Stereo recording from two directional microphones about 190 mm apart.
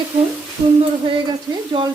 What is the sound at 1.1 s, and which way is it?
Speech, 25° right (ahead or behind).